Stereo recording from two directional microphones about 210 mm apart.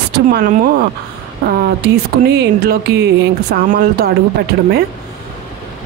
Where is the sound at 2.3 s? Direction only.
55° right (ahead or behind).